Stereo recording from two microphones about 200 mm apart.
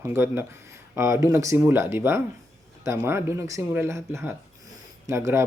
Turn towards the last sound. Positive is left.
turn(degrees=-15)  # may be behind; listen again after turning